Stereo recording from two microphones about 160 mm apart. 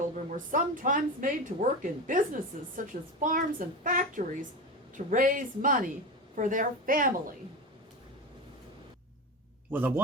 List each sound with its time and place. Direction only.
0.3 s a woman's voice: 55° right (ahead or behind)
9.7 s a man's voice: 10° right (ahead or behind)